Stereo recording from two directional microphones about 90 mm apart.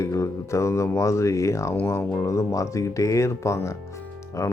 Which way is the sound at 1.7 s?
25° left (ahead or behind).